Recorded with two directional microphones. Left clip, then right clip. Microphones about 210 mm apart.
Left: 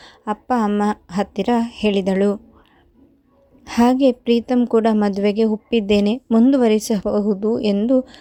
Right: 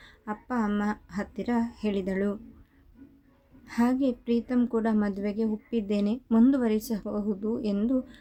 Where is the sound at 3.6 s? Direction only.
35° left (ahead or behind).